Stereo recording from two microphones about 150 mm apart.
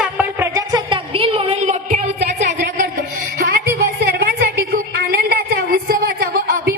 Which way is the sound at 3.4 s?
80° right.